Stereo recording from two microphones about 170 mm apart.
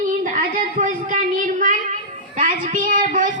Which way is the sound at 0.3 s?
50° right (ahead or behind).